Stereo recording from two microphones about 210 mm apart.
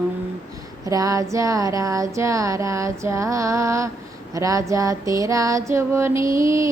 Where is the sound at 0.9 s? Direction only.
15° right (ahead or behind).